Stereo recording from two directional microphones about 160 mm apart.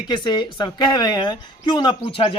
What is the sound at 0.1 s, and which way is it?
A man's voice, 30° left (ahead or behind).